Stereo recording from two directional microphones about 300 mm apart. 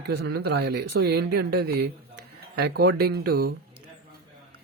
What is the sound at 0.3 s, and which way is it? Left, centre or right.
Speech, right.